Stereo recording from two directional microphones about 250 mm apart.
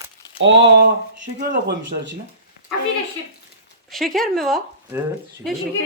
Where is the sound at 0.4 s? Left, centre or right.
Right.